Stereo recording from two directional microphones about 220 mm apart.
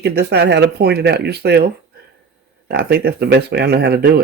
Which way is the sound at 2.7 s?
45° right (ahead or behind).